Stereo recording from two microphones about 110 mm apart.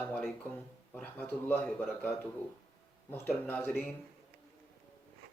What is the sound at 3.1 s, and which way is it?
Speech, 20° left (ahead or behind).